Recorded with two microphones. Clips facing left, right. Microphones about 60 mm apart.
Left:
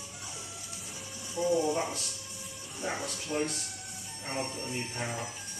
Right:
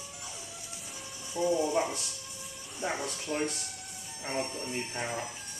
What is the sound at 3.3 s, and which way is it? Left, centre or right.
Speech, centre.